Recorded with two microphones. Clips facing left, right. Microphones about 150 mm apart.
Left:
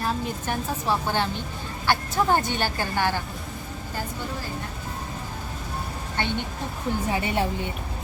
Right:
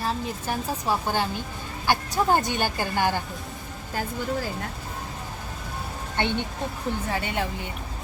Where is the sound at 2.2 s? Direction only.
15° right (ahead or behind).